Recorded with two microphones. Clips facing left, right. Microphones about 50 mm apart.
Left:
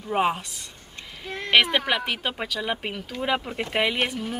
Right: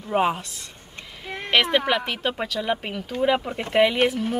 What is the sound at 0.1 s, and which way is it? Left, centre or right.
Speech, centre.